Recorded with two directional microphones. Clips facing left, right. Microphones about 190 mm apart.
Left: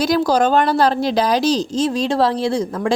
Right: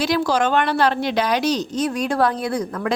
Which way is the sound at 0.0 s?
40° left (ahead or behind).